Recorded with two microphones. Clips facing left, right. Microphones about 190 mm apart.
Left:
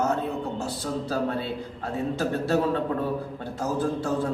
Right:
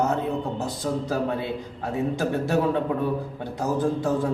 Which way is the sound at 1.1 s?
15° right (ahead or behind).